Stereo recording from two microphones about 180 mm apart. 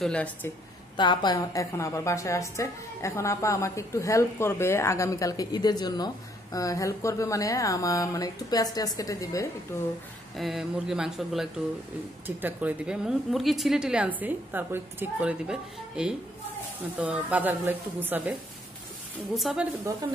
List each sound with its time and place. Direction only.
0.0 s a woman's voice: 5° left (ahead or behind)
0.9 s a woman's voice: 25° left (ahead or behind)
10.3 s a woman's voice: centre (ahead or behind)
19.3 s a woman's voice: 5° right (ahead or behind)